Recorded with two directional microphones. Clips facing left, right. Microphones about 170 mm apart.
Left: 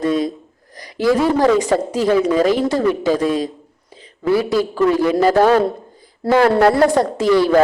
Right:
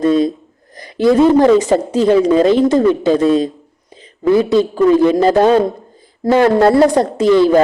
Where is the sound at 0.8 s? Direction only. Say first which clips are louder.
Right 5 dB; 25° right (ahead or behind).